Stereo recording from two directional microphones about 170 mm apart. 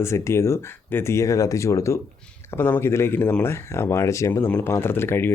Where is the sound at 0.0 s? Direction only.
15° left (ahead or behind).